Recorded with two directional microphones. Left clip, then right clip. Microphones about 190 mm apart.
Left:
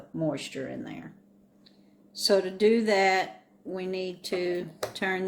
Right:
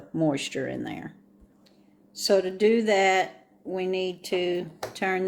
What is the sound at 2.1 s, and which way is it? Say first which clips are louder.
Speech: right 2 dB; 10° right (ahead or behind).